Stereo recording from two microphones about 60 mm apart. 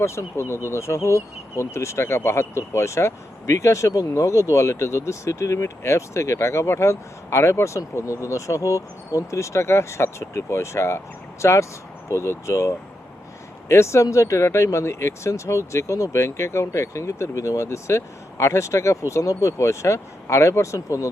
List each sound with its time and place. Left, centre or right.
0.0 s speech: left